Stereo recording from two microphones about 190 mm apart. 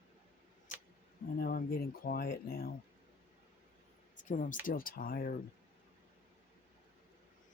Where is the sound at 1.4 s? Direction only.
50° left (ahead or behind).